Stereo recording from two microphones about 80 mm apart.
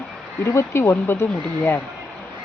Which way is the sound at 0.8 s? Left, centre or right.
Left.